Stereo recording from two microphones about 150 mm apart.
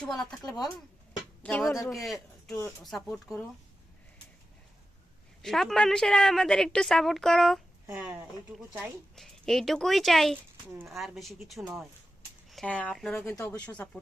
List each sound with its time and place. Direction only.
0.0 s a woman's voice: 5° left (ahead or behind)
0.4 s speech: 25° left (ahead or behind)
1.4 s music: 10° left (ahead or behind)
1.9 s a woman's voice: centre (ahead or behind)
5.4 s a woman's voice: centre (ahead or behind)
7.9 s speech: 15° right (ahead or behind)
9.1 s a woman's voice: centre (ahead or behind)
13.2 s speech: 15° left (ahead or behind)